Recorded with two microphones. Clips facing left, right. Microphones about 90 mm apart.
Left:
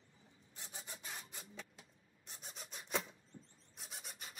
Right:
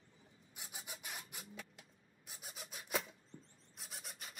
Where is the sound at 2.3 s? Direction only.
5° right (ahead or behind).